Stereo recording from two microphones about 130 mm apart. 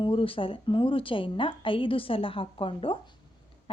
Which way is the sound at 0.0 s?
40° left (ahead or behind).